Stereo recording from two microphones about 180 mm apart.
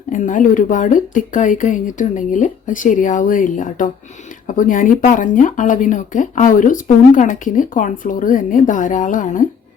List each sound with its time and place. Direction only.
0.1 s speech: 45° left (ahead or behind)